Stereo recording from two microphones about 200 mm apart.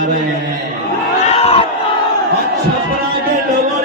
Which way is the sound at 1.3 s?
30° left (ahead or behind).